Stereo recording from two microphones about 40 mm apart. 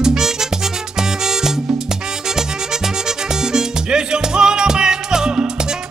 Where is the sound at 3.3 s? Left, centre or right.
Centre.